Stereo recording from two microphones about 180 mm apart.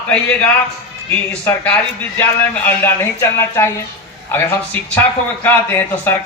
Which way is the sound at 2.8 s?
10° left (ahead or behind).